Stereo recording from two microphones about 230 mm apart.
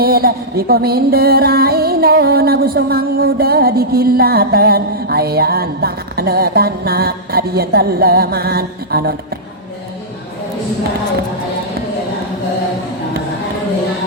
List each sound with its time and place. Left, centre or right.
0.0 s music: right